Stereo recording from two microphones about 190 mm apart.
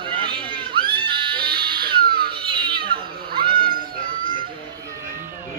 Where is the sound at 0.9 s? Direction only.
25° right (ahead or behind).